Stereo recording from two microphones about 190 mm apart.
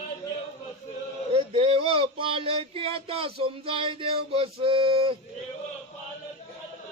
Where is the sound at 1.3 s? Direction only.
30° right (ahead or behind).